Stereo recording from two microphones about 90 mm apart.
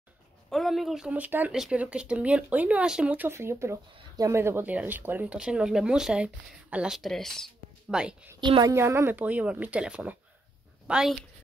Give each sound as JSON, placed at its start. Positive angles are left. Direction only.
{"t": 0.5, "sound": "speech", "side_deg": 0}
{"t": 1.1, "sound": "speech", "side_deg": -20}
{"t": 3.3, "sound": "speech", "side_deg": -30}
{"t": 7.0, "sound": "speech", "side_deg": 5}
{"t": 7.9, "sound": "speech", "side_deg": -10}
{"t": 8.4, "sound": "a woman's voice", "side_deg": -55}
{"t": 8.7, "sound": "speech", "side_deg": -30}